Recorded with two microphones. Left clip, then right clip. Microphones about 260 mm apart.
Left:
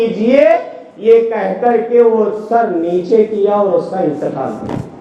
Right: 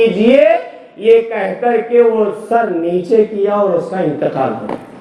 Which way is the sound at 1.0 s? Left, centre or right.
Right.